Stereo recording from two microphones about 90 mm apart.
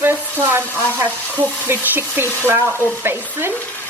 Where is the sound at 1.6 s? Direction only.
20° right (ahead or behind).